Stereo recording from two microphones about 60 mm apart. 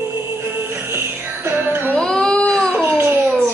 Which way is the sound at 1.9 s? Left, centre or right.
Centre.